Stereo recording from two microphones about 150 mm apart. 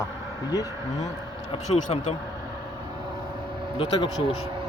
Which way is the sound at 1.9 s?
45° left (ahead or behind).